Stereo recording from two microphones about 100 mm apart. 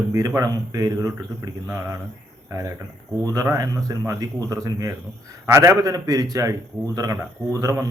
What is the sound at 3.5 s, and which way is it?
Speech, 35° right (ahead or behind).